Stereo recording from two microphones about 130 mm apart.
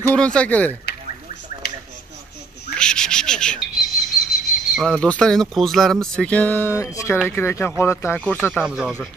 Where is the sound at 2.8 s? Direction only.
5° left (ahead or behind).